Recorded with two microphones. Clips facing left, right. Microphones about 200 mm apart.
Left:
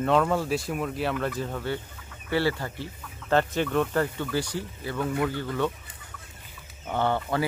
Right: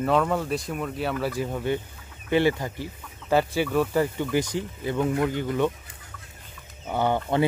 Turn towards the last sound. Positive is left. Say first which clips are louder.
# right 3 dB
turn(degrees=-20)  # may be behind; listen again after turning